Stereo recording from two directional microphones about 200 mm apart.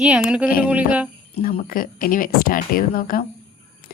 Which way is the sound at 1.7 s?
45° left (ahead or behind).